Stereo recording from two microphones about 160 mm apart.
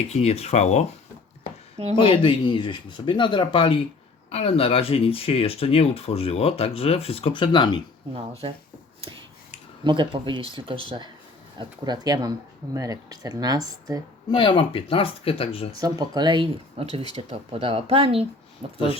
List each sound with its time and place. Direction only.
0.1 s speech: 40° left (ahead or behind)
2.0 s speech: 35° left (ahead or behind)
8.1 s speech: 35° right (ahead or behind)
9.8 s speech: 30° right (ahead or behind)
14.3 s speech: 30° left (ahead or behind)
15.8 s speech: 25° right (ahead or behind)